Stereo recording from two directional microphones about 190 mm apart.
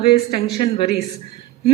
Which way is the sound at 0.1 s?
25° left (ahead or behind).